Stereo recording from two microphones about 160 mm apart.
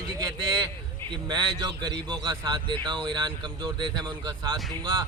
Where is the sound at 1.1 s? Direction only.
30° right (ahead or behind).